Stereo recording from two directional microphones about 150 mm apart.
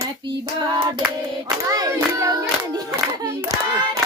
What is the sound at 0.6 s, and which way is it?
Speech, 30° right (ahead or behind).